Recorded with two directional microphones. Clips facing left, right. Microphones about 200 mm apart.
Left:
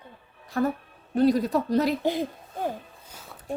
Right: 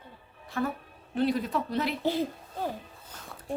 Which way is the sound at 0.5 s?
40° left (ahead or behind).